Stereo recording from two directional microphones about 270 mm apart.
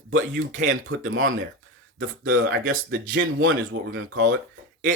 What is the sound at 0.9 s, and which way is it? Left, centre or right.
Speech, right.